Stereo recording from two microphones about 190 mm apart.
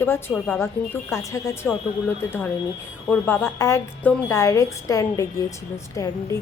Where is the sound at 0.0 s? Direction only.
10° left (ahead or behind).